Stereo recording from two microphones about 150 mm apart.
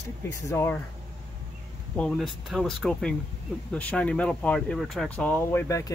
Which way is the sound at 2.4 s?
Centre (ahead or behind).